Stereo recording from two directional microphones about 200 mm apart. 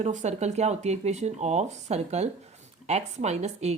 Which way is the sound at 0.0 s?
35° right (ahead or behind).